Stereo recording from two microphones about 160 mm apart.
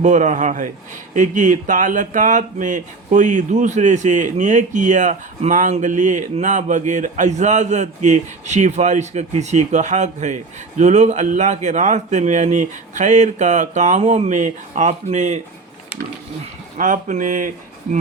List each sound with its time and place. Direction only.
0.0 s speech: 50° right (ahead or behind)
16.7 s speech: 55° right (ahead or behind)